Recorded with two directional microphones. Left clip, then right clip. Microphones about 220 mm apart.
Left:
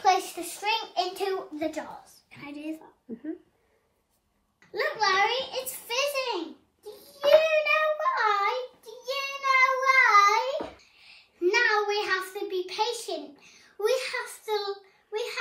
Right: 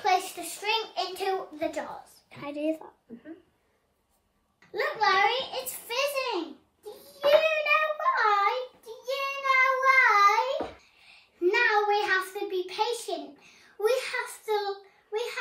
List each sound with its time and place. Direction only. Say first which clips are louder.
0.6 s child singing: left 1 dB; centre (ahead or behind)
2.3 s speech: right 7 dB; 20° right (ahead or behind)
4.7 s a child's voice: even; centre (ahead or behind)
6.8 s child singing: right 1 dB; centre (ahead or behind)